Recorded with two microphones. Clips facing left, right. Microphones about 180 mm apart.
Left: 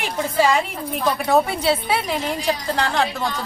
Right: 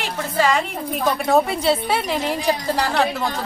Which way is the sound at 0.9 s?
Centre (ahead or behind).